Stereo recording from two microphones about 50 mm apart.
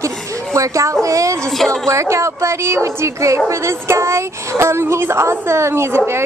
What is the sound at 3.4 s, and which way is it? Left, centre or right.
Speech, right.